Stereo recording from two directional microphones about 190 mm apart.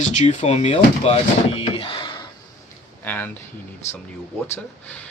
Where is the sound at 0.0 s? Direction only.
40° left (ahead or behind).